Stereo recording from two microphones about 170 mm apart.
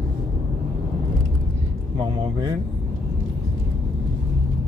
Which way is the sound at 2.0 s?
25° right (ahead or behind).